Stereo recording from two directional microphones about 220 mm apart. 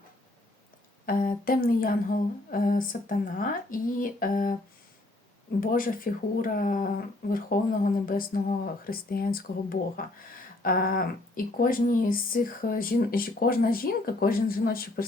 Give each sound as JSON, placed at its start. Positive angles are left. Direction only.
{"t": 1.0, "sound": "speech", "side_deg": 40}
{"t": 5.5, "sound": "speech", "side_deg": 40}